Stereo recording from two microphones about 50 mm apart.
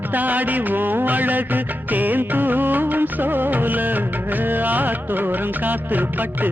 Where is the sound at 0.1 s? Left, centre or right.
Right.